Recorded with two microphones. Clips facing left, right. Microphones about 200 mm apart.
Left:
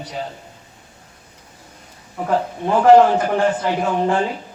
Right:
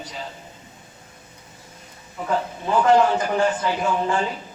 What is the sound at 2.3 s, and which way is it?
A man's voice, 60° left (ahead or behind).